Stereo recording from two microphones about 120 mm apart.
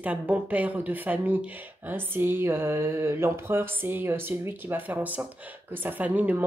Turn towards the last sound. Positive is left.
turn(degrees=-15)  # may be behind; listen again after turning